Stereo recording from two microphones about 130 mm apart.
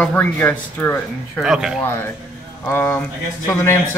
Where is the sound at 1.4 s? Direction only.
5° right (ahead or behind).